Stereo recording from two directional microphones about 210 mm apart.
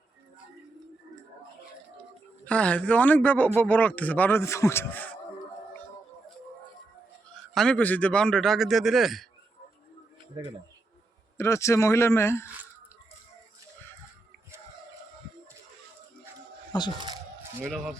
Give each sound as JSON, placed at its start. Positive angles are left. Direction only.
{"t": 2.4, "sound": "a man's voice", "side_deg": 5}
{"t": 7.5, "sound": "a man's voice", "side_deg": 5}
{"t": 11.3, "sound": "a man's voice", "side_deg": 15}
{"t": 16.7, "sound": "speech", "side_deg": 20}